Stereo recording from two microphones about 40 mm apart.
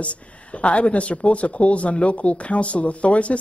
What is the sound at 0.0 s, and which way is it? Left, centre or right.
Speech, left.